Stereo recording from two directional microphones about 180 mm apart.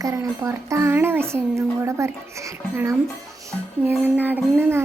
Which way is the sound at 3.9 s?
10° right (ahead or behind).